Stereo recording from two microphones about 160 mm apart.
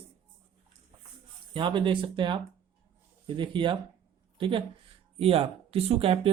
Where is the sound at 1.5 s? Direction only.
30° right (ahead or behind).